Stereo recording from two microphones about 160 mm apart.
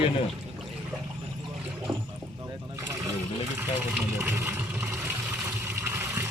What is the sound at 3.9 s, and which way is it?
Vehicle, 15° right (ahead or behind).